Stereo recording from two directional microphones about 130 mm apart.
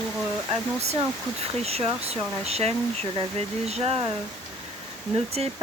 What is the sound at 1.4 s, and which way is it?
Speech, 50° right (ahead or behind).